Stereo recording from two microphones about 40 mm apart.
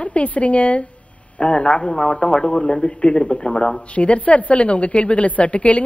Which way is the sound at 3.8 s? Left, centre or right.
Left.